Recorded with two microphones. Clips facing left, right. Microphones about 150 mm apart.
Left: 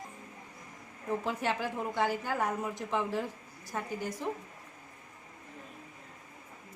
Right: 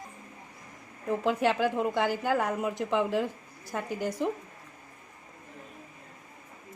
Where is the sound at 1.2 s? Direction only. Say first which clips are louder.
Right 10 dB; 90° right.